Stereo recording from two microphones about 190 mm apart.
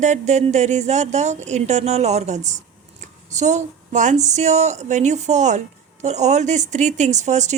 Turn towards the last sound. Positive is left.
turn(degrees=-40)  # may be behind; listen again after turning